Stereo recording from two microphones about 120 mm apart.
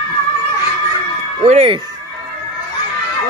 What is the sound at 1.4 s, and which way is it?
Speech, 70° right (ahead or behind).